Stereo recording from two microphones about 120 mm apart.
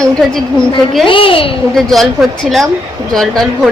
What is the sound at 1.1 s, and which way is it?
Speech, 50° left (ahead or behind).